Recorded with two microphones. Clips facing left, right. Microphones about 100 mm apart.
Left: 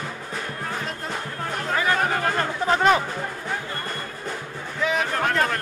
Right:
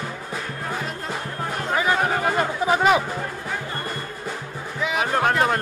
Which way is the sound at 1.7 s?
15° right (ahead or behind).